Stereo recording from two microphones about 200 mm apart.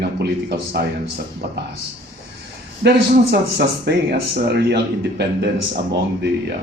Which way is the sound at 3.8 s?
55° right (ahead or behind).